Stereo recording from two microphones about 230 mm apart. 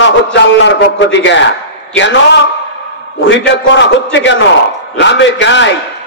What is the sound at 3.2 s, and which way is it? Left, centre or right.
A man's voice, left.